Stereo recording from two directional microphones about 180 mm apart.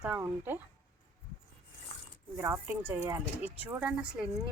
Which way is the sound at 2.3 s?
15° right (ahead or behind).